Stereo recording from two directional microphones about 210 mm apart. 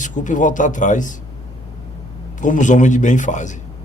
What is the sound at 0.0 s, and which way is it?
A man's voice, 35° left (ahead or behind).